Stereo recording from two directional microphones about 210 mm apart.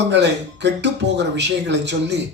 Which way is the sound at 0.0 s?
55° right (ahead or behind).